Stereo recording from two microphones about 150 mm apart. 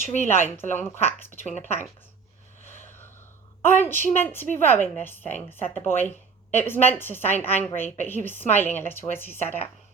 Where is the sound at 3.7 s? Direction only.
15° left (ahead or behind).